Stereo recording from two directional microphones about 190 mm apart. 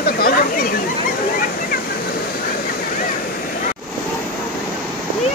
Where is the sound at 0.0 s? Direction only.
50° left (ahead or behind).